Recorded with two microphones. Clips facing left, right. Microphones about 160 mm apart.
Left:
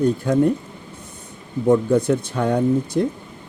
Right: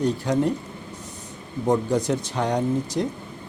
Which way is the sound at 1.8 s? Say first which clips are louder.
Left 5 dB; 55° left (ahead or behind).